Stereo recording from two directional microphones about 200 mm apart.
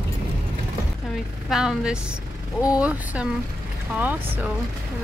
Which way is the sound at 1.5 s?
5° right (ahead or behind).